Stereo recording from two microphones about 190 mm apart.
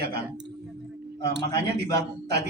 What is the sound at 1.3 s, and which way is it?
Speech, 60° right (ahead or behind).